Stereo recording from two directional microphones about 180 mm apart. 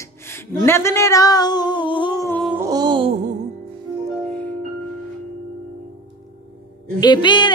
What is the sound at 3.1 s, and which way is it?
Music, 40° right (ahead or behind).